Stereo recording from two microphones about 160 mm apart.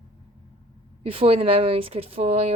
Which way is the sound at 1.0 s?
35° right (ahead or behind).